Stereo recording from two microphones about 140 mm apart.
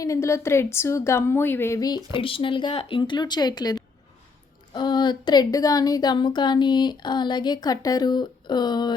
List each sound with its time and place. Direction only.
0.0 s a woman's voice: 20° left (ahead or behind)
2.1 s a woman's voice: 40° left (ahead or behind)